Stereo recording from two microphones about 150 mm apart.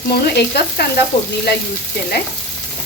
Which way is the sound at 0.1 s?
90° left.